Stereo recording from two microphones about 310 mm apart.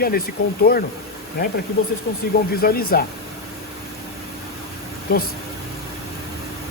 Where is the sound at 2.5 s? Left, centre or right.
Left.